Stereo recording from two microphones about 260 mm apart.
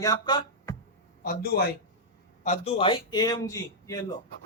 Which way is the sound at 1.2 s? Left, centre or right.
Left.